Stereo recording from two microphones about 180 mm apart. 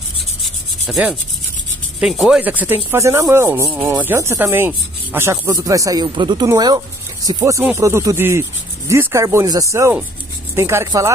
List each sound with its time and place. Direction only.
0.4 s rub: centre (ahead or behind)
2.0 s speech: 5° right (ahead or behind)